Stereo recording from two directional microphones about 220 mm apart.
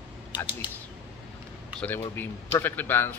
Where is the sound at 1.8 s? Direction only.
10° left (ahead or behind).